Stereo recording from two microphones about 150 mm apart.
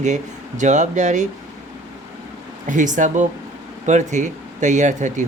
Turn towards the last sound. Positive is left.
turn(degrees=-55)  # may be behind; listen again after turning